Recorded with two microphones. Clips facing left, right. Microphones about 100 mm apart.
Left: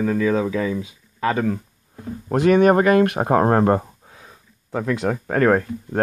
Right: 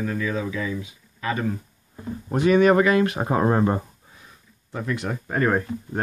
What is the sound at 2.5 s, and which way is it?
Speech, 45° left (ahead or behind).